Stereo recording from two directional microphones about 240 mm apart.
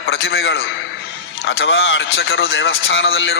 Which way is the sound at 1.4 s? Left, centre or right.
Left.